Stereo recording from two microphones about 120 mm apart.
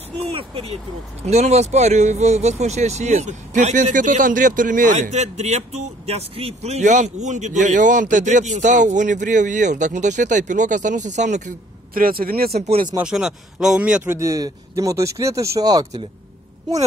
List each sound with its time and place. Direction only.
0.3 s speech: 50° right (ahead or behind)
1.2 s speech: 65° right (ahead or behind)
12.5 s speech: 60° right (ahead or behind)
13.0 s speech: 5° right (ahead or behind)
14.2 s speech: 30° right (ahead or behind)